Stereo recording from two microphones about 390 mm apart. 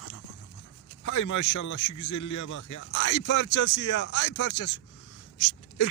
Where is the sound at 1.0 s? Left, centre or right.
Left.